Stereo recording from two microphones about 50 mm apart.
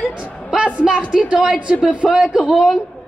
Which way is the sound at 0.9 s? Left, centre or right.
Right.